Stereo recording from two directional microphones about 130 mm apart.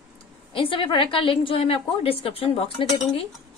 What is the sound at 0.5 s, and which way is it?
A woman's voice, 40° left (ahead or behind).